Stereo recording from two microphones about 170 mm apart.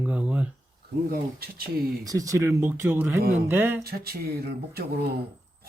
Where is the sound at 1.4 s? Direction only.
60° right (ahead or behind).